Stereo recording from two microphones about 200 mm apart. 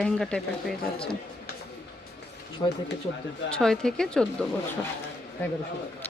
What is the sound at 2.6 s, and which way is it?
Speech, 20° left (ahead or behind).